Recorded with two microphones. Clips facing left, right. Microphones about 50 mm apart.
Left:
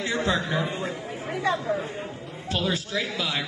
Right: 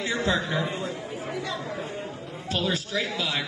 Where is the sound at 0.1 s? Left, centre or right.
Left.